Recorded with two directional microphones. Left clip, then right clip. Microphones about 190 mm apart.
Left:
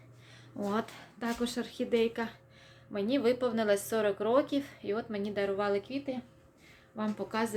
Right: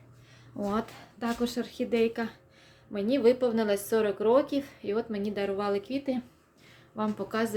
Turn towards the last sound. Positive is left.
turn(degrees=-10)  # may be behind; listen again after turning